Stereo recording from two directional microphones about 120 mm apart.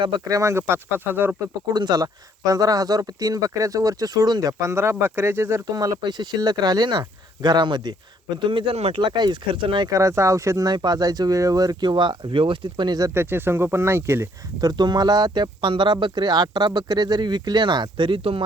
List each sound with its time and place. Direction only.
0.3 s speech: 25° right (ahead or behind)
1.4 s speech: 35° right (ahead or behind); by 9.0 s 60° right (ahead or behind)
9.0 s speech: 40° right (ahead or behind)
9.9 s speech: 25° right (ahead or behind)
13.1 s speech: 20° right (ahead or behind); by 18.4 s 50° right (ahead or behind)